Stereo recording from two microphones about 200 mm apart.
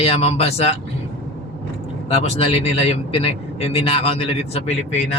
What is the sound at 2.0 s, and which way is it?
A man's voice, 30° left (ahead or behind).